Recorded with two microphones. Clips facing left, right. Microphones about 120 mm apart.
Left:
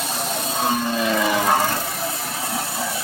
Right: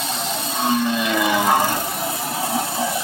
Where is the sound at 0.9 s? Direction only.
5° right (ahead or behind).